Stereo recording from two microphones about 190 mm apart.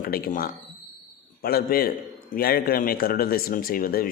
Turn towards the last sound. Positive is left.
turn(degrees=50)  # may be behind; listen again after turning